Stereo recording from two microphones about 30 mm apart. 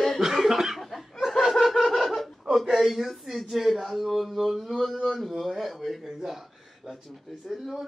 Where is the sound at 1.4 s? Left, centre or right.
Centre.